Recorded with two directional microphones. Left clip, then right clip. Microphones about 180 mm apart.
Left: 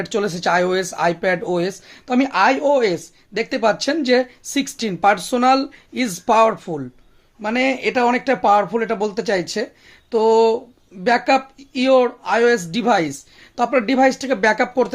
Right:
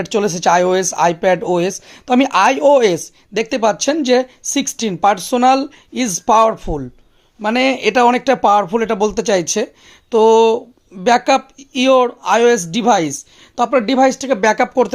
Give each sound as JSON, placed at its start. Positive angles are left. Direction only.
{"t": 0.0, "sound": "speech", "side_deg": -30}